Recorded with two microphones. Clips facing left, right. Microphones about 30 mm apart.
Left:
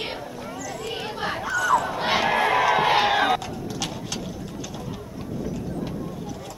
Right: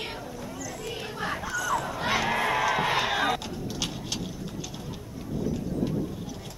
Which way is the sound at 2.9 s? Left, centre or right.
Left.